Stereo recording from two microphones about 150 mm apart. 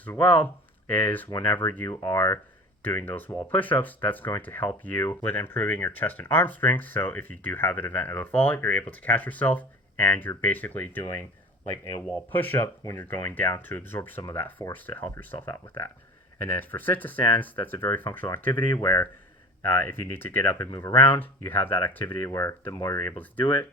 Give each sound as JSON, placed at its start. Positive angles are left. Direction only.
{"t": 0.0, "sound": "speech", "side_deg": 10}
{"t": 1.9, "sound": "speech", "side_deg": 25}
{"t": 2.1, "sound": "speech", "side_deg": 15}
{"t": 16.4, "sound": "speech", "side_deg": 15}